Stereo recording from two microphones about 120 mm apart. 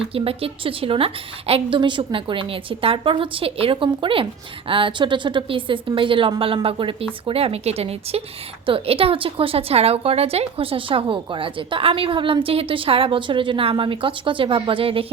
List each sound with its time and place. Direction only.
0.1 s a woman's voice: 50° right (ahead or behind)